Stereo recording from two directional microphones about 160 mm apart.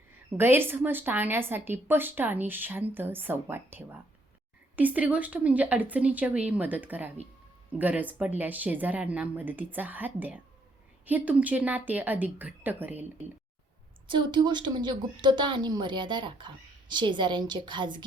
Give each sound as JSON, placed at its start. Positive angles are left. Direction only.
{"t": 0.3, "sound": "speech", "side_deg": -15}
{"t": 14.1, "sound": "a woman's voice", "side_deg": -30}